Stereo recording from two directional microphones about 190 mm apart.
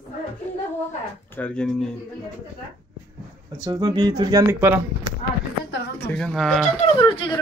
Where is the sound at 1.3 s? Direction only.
5° left (ahead or behind).